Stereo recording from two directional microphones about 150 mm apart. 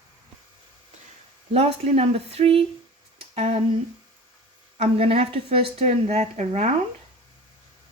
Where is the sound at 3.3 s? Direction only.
45° right (ahead or behind).